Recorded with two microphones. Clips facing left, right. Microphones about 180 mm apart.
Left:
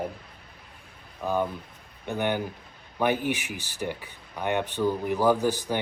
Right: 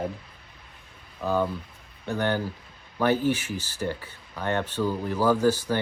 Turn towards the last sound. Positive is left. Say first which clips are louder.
# right 1 dB
turn(degrees=15)  # may be behind; listen again after turning